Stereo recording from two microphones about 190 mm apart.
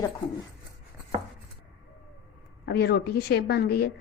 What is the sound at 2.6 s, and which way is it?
A woman's voice, 55° left (ahead or behind).